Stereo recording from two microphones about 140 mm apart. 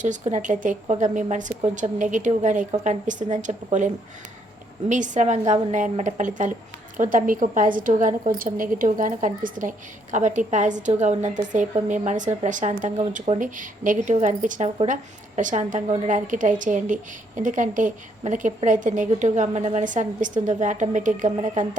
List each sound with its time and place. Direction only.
0.0 s a woman's voice: 60° right (ahead or behind)